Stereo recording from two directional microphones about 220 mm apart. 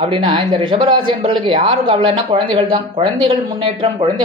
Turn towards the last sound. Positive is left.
turn(degrees=-20)  # may be behind; listen again after turning